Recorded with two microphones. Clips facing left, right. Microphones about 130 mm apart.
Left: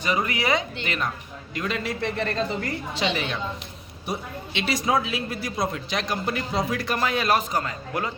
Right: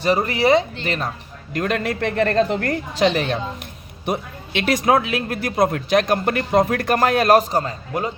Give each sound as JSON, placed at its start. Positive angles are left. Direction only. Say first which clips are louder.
{"t": 0.0, "sound": "speech", "louder": "right 7 dB", "side_deg": -35}
{"t": 1.5, "sound": "speech", "louder": "right 6 dB", "side_deg": -55}
{"t": 2.9, "sound": "a woman's voice", "louder": "right 9 dB", "side_deg": -45}
{"t": 4.0, "sound": "speech", "louder": "right 6 dB", "side_deg": -60}
{"t": 7.5, "sound": "a man's voice", "louder": "right 5 dB", "side_deg": -30}